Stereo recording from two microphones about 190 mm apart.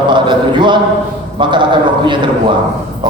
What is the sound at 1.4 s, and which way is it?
Clip-clop, 25° right (ahead or behind).